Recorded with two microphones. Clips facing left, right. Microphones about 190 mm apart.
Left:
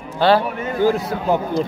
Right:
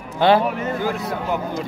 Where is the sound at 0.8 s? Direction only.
35° left (ahead or behind).